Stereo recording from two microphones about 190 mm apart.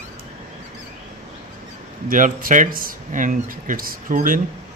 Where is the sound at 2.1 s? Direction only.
45° right (ahead or behind).